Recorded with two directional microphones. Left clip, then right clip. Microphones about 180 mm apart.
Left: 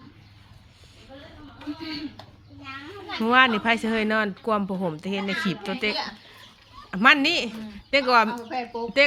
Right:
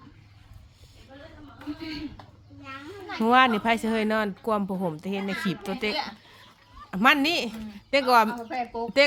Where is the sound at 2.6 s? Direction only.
25° left (ahead or behind).